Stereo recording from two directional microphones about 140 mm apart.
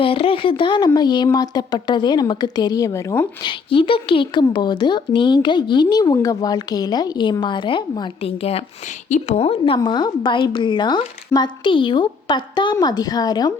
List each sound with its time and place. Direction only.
0.0 s a woman's voice: 40° left (ahead or behind); by 3.2 s 20° left (ahead or behind)
3.4 s a woman's voice: 40° left (ahead or behind)
9.0 s a woman's voice: 55° left (ahead or behind); by 13.5 s 30° left (ahead or behind)